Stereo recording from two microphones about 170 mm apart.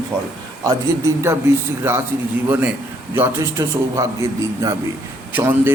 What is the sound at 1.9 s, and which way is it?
Speech, 15° right (ahead or behind).